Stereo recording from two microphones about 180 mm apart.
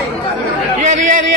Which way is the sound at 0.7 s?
45° right (ahead or behind).